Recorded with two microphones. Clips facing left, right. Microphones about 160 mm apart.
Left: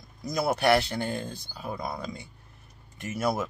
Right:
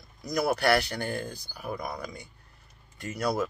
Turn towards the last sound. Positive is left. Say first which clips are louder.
# even
turn(degrees=25)  # may be behind; listen again after turning